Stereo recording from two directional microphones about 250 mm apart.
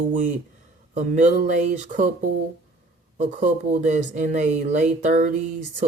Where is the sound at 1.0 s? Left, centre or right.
Right.